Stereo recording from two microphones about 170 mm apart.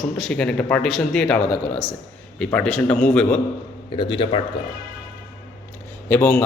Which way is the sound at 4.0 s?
30° left (ahead or behind).